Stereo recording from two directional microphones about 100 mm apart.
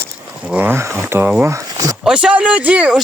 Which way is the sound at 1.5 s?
30° right (ahead or behind).